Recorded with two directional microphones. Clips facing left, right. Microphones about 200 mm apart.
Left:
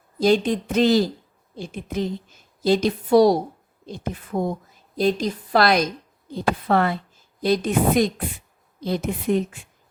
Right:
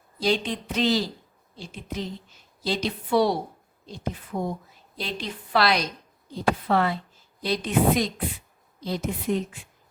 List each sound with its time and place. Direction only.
0.2 s a woman's voice: 45° left (ahead or behind)
3.8 s a woman's voice: 55° left (ahead or behind)